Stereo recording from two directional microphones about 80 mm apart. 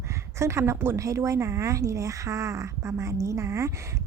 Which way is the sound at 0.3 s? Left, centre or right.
Right.